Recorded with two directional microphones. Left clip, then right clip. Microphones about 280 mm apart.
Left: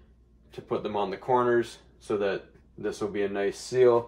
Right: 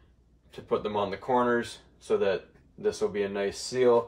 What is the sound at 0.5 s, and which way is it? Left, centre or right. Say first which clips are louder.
Speech: right 2 dB; centre.